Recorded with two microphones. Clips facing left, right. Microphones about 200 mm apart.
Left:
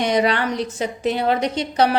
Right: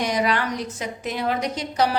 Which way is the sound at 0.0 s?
25° left (ahead or behind).